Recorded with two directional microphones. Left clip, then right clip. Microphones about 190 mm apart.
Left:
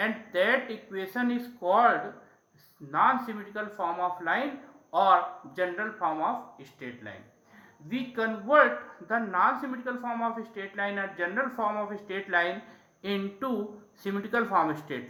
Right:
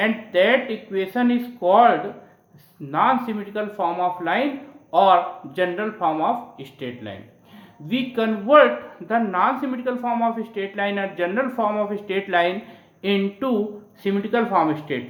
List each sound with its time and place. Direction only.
0.0 s speech: centre (ahead or behind); by 8.3 s 25° right (ahead or behind)
8.4 s speech: 10° right (ahead or behind); by 15.0 s 10° left (ahead or behind)